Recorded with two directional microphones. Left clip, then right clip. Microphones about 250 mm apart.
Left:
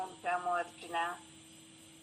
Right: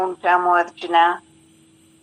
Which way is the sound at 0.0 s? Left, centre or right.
Right.